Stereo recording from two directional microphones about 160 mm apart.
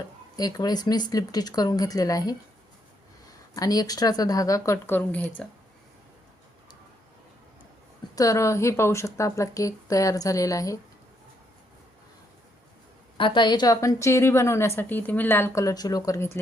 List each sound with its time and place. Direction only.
0.3 s speech: 25° left (ahead or behind)
3.5 s speech: 25° left (ahead or behind); by 5.5 s 5° left (ahead or behind)
8.1 s speech: 20° left (ahead or behind)
13.1 s a woman's voice: 30° left (ahead or behind)